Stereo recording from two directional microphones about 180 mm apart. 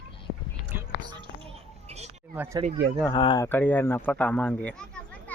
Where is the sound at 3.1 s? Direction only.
25° left (ahead or behind).